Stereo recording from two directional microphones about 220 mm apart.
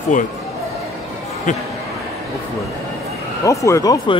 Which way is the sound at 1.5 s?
35° left (ahead or behind).